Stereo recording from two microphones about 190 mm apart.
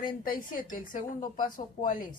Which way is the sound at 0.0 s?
50° left (ahead or behind).